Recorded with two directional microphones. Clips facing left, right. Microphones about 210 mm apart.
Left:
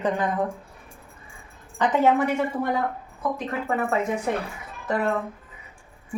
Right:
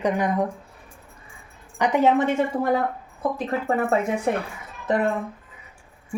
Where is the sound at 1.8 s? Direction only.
15° right (ahead or behind).